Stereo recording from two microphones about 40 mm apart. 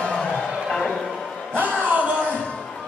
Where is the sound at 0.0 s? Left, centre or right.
Centre.